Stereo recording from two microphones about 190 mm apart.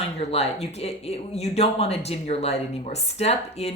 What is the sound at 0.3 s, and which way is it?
Speech, 35° left (ahead or behind).